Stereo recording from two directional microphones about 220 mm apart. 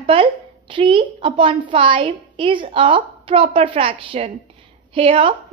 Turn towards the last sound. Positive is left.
turn(degrees=-25)  # may be behind; listen again after turning